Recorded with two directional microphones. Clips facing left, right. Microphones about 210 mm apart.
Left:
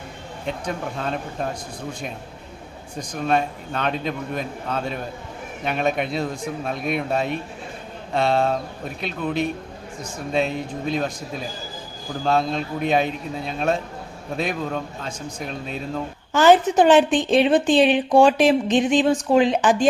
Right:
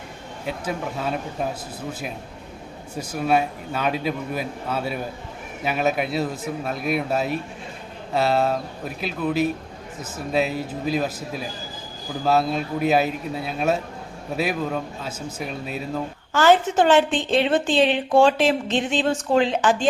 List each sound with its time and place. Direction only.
0.4 s a man's voice: 5° right (ahead or behind)
16.3 s a woman's voice: 15° left (ahead or behind)